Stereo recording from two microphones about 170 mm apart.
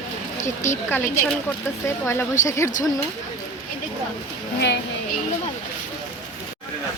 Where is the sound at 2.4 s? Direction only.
15° left (ahead or behind).